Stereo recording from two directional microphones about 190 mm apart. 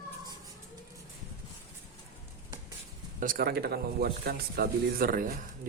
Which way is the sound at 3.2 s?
50° right (ahead or behind).